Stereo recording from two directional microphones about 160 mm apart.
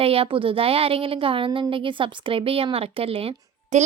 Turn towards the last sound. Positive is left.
turn(degrees=-35)  # may be behind; listen again after turning